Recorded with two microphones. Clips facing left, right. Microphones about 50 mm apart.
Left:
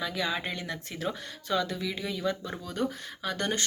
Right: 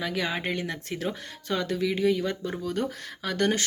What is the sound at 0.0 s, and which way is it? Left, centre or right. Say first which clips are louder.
Speech: right 2 dB; right.